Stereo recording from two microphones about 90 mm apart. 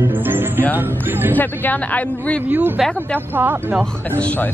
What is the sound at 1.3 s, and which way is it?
A man's voice, 20° left (ahead or behind).